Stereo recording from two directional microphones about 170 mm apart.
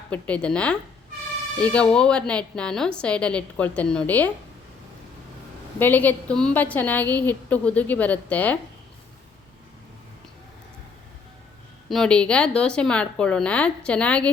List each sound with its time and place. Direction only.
0.1 s a woman's voice: 5° left (ahead or behind)
5.8 s a woman's voice: 10° left (ahead or behind)
11.9 s a woman's voice: 5° left (ahead or behind)